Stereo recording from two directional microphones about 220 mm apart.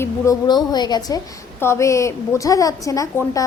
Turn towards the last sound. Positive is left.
turn(degrees=15)  # may be behind; listen again after turning